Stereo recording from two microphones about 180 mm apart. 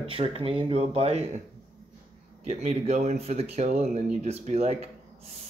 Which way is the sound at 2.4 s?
40° right (ahead or behind).